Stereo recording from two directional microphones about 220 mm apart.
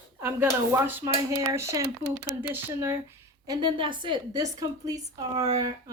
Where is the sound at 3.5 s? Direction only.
20° right (ahead or behind).